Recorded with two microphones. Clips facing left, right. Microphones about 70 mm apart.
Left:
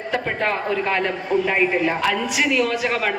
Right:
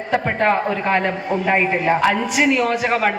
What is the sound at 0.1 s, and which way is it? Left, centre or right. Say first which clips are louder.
A woman's voice: right 5 dB; right.